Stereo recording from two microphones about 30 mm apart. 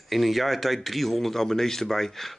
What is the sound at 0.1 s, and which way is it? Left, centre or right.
Speech, centre.